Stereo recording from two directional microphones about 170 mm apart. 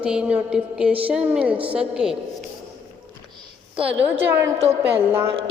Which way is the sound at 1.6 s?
35° right (ahead or behind).